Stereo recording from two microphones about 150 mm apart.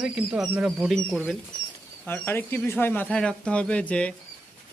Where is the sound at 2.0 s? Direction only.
15° left (ahead or behind).